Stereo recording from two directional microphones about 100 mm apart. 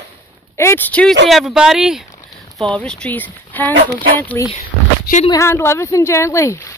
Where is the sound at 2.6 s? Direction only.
10° left (ahead or behind).